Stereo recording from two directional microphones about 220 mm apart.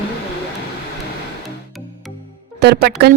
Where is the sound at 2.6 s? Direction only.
50° right (ahead or behind).